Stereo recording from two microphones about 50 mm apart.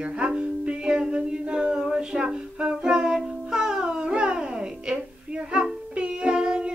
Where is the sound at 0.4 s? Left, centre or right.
Right.